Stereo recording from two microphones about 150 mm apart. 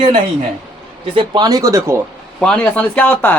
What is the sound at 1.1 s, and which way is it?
Speech, 30° right (ahead or behind).